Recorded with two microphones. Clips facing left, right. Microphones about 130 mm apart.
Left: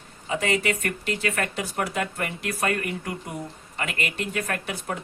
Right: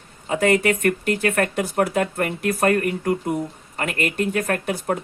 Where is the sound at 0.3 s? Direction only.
50° right (ahead or behind).